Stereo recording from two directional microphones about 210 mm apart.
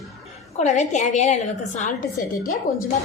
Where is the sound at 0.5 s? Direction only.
35° left (ahead or behind).